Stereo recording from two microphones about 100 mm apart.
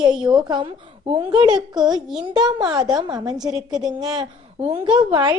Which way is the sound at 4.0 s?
40° right (ahead or behind).